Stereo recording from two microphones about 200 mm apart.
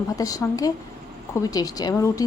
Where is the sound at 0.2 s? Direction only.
15° left (ahead or behind).